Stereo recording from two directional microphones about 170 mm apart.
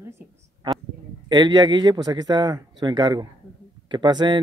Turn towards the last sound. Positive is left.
turn(degrees=-25)  # may be behind; listen again after turning